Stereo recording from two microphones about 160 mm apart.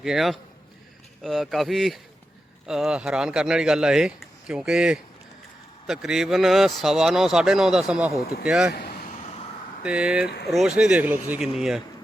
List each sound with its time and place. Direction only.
0.0 s speech: centre (ahead or behind)
9.8 s speech: 5° right (ahead or behind)
10.2 s speech: 90° left
10.5 s speech: 5° right (ahead or behind)